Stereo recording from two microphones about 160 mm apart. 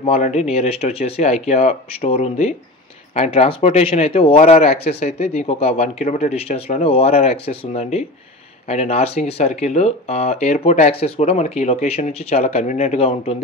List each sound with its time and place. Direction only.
0.0 s speech: 45° left (ahead or behind)